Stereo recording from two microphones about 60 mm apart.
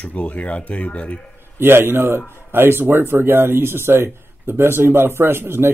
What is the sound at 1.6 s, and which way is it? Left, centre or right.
Speech, right.